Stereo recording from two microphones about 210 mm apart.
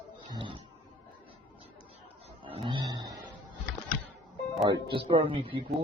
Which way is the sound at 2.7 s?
20° right (ahead or behind).